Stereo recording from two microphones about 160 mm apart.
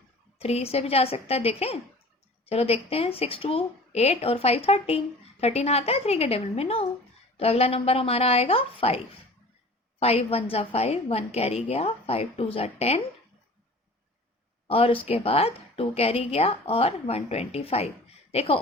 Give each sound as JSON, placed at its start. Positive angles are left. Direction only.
{"t": 0.3, "sound": "a woman's voice", "side_deg": 40}
{"t": 10.0, "sound": "a woman's voice", "side_deg": 40}
{"t": 14.7, "sound": "a woman's voice", "side_deg": 35}